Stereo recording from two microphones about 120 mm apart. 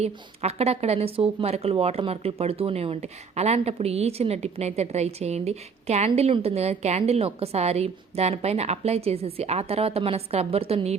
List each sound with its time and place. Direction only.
0.0 s a woman's voice: 60° right (ahead or behind)